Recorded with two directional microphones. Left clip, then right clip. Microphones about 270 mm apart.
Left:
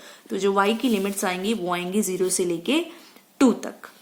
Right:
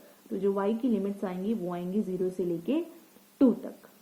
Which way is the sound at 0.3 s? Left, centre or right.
Centre.